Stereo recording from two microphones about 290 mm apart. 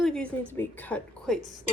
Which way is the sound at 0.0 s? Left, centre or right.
Centre.